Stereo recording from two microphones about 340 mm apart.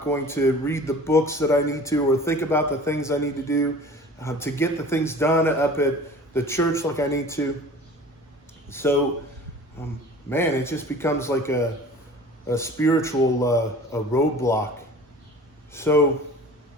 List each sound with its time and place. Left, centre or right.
0.1 s speech: centre
8.7 s speech: centre
15.7 s speech: centre